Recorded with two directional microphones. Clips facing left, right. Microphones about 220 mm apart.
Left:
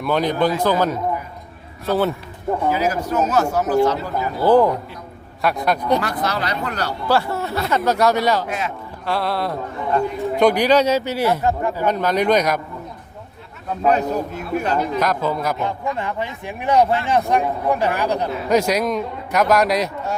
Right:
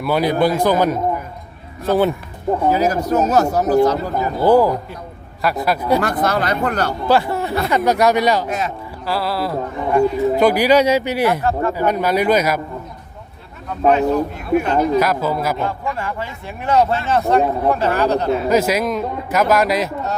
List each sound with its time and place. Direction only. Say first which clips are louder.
0.0 s speech: right 2 dB; 10° right (ahead or behind)
2.6 s speech: right 4 dB; 40° right (ahead or behind)
4.4 s a man's voice: right 1 dB; 10° right (ahead or behind)
6.0 s speech: right 5 dB; 50° right (ahead or behind)
7.1 s speech: right 2 dB; 15° right (ahead or behind)
8.4 s speech: right 3 dB; 40° right (ahead or behind)
9.0 s a man's voice: right 1 dB; 5° right (ahead or behind)
11.4 s speech: right 2 dB; 15° left (ahead or behind)
11.9 s speech: right 1 dB; 10° right (ahead or behind)
13.9 s speech: right 4 dB; 35° left (ahead or behind)
14.9 s a man's voice: right 3 dB; 5° right (ahead or behind)
15.6 s speech: right 1 dB; 20° left (ahead or behind)
18.4 s a man's voice: left 3 dB; 5° right (ahead or behind)